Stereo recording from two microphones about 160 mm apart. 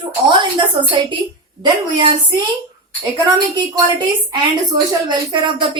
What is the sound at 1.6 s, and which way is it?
Speech, 30° right (ahead or behind).